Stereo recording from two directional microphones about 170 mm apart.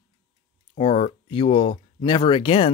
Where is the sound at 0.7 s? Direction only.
35° left (ahead or behind).